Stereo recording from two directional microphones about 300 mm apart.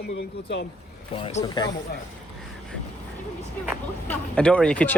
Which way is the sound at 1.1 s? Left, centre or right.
Centre.